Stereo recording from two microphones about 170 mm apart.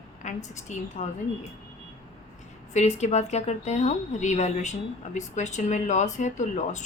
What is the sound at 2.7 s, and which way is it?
A woman's voice, 40° left (ahead or behind).